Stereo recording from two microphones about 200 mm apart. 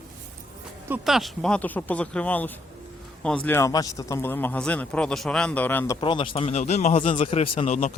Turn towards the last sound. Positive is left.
turn(degrees=25)  # may be behind; listen again after turning